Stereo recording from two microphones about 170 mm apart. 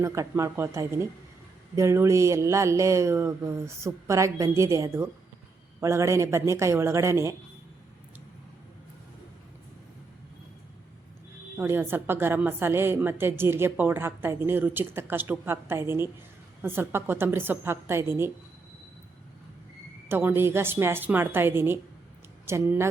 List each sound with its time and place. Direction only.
0.0 s a woman's voice: 15° right (ahead or behind)
11.5 s a woman's voice: 10° right (ahead or behind)
20.1 s a woman's voice: 15° right (ahead or behind)